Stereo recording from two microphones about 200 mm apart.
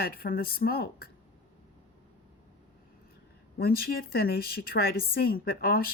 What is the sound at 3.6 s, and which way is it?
A woman's voice, 50° left (ahead or behind).